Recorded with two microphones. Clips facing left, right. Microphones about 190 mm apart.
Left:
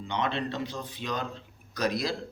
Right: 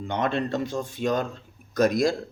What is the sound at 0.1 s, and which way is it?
Speech, 45° right (ahead or behind).